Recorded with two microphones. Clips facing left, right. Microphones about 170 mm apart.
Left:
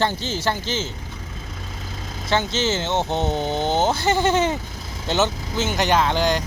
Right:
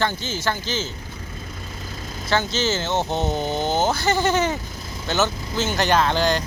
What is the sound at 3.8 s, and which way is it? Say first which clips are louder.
Speech: left 1 dB; 25° left (ahead or behind).